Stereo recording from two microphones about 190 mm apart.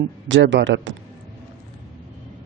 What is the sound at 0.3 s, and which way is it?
Speech, 75° right (ahead or behind).